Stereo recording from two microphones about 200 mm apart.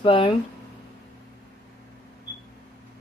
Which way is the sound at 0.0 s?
25° left (ahead or behind).